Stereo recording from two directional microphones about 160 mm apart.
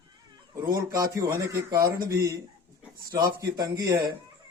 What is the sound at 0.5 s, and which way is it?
Speech, 25° right (ahead or behind).